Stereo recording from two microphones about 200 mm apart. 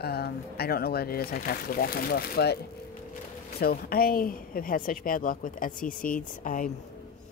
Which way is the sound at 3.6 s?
50° left (ahead or behind).